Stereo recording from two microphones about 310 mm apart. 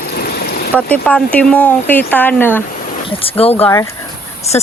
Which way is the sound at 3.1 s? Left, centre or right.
Centre.